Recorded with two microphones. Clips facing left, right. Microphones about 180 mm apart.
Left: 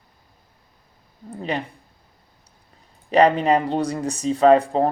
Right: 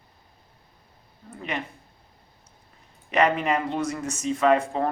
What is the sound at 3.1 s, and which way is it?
Speech, 35° left (ahead or behind).